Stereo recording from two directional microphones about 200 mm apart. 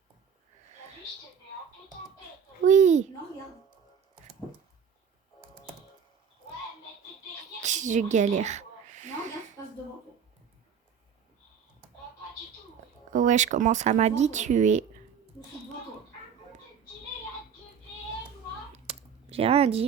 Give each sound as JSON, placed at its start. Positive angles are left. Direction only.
{"t": 2.6, "sound": "a child's voice", "side_deg": -35}
{"t": 7.6, "sound": "crow", "side_deg": -35}
{"t": 13.1, "sound": "speech", "side_deg": -35}
{"t": 18.7, "sound": "typing", "side_deg": -30}